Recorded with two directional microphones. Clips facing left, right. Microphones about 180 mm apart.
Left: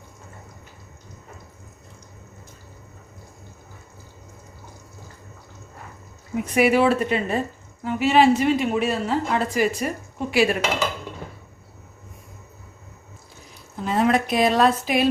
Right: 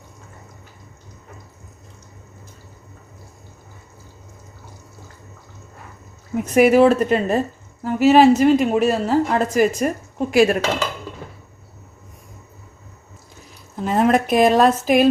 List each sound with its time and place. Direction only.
6.3 s a woman's voice: 45° right (ahead or behind)
13.8 s speech: 50° right (ahead or behind)